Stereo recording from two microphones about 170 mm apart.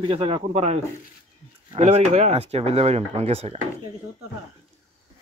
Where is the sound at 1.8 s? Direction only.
40° right (ahead or behind).